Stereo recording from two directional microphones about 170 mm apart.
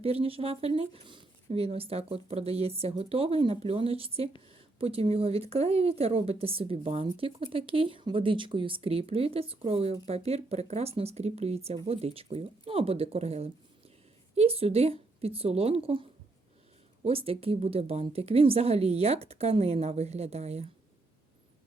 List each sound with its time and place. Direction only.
0.0 s speech: 35° right (ahead or behind)